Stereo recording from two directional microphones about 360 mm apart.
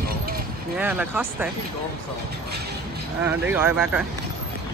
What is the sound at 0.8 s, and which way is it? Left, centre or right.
Speech, centre.